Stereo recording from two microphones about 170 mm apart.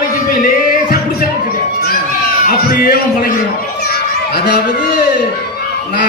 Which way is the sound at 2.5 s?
60° left (ahead or behind).